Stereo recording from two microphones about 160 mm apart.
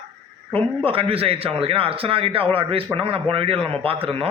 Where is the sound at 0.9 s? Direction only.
35° right (ahead or behind).